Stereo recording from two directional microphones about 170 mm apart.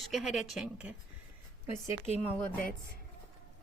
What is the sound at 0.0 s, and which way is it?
Speech, centre (ahead or behind).